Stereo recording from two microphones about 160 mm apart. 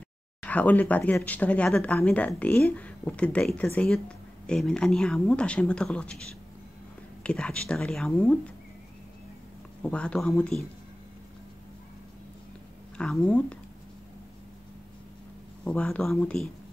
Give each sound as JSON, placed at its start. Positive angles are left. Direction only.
{"t": 0.4, "sound": "speech", "side_deg": 10}
{"t": 7.2, "sound": "speech", "side_deg": 5}
{"t": 9.8, "sound": "speech", "side_deg": 5}
{"t": 12.9, "sound": "speech", "side_deg": 5}
{"t": 15.6, "sound": "speech", "side_deg": 10}